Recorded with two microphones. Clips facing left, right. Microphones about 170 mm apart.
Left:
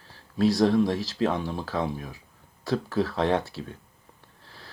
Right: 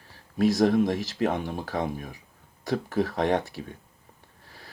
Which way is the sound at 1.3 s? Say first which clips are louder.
Even; 50° right (ahead or behind).